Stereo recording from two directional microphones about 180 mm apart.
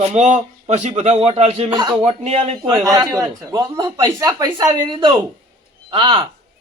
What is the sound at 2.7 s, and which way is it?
Speech, 20° right (ahead or behind).